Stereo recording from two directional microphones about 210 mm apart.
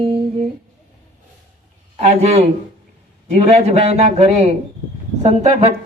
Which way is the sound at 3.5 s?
30° right (ahead or behind).